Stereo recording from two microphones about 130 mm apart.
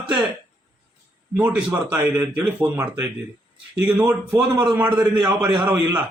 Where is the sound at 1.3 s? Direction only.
10° right (ahead or behind).